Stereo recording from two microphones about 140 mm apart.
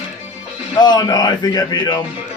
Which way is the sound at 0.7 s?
30° left (ahead or behind).